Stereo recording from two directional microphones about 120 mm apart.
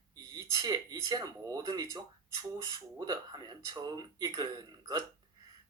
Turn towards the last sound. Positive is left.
turn(degrees=-35)  # may be behind; listen again after turning